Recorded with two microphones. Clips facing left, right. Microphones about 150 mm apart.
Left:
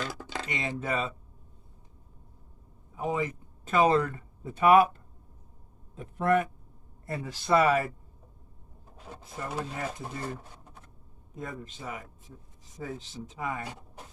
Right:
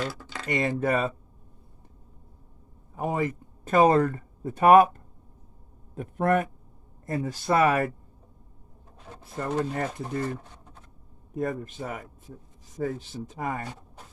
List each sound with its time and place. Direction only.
0.4 s speech: 50° right (ahead or behind)
2.9 s speech: 50° right (ahead or behind)
9.1 s speech: 10° left (ahead or behind)
9.4 s speech: 60° right (ahead or behind)
11.3 s speech: 60° right (ahead or behind)
13.7 s a sound: 15° left (ahead or behind)